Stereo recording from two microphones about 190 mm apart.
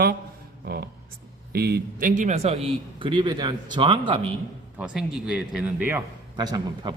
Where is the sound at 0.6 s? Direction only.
55° right (ahead or behind); by 4.3 s 25° right (ahead or behind).